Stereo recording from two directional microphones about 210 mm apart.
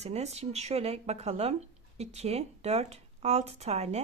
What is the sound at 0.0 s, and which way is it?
Speech, 30° right (ahead or behind).